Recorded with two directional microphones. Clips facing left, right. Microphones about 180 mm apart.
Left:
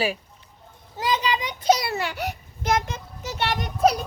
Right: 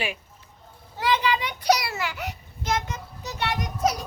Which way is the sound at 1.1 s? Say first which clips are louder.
Right 1 dB; 20° left (ahead or behind).